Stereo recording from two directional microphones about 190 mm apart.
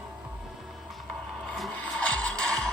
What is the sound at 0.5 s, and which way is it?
Mechanisms, centre (ahead or behind).